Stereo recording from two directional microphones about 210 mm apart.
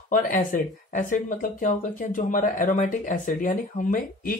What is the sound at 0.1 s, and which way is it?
Speech, 40° left (ahead or behind).